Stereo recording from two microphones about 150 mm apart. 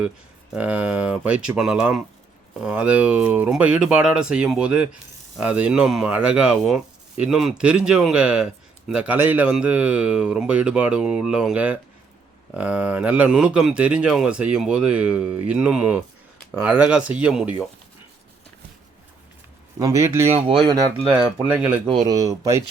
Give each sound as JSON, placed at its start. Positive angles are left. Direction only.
{"t": 0.5, "sound": "speech", "side_deg": -10}
{"t": 19.8, "sound": "speech", "side_deg": -20}
{"t": 20.3, "sound": "speech", "side_deg": -35}
{"t": 21.4, "sound": "speech", "side_deg": -10}
{"t": 22.0, "sound": "speech", "side_deg": -20}